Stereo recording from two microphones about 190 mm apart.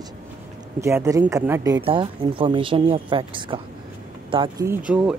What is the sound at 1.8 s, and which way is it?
Speech, 25° right (ahead or behind).